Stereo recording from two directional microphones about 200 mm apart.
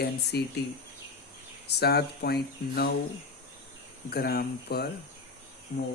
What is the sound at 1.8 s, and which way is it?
Speech, 55° left (ahead or behind).